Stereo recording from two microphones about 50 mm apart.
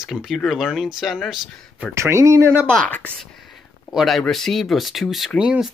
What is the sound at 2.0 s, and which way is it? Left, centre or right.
Speech, right.